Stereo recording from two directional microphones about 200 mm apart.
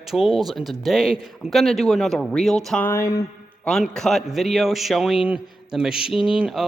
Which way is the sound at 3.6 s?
5° left (ahead or behind).